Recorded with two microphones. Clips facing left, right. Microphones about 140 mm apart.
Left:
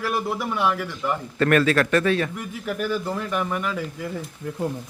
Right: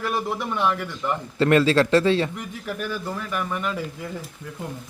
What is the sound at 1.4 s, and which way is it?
Speech, 25° right (ahead or behind).